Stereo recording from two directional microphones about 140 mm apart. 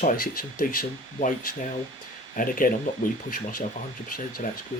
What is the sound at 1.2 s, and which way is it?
Speech, 65° left (ahead or behind).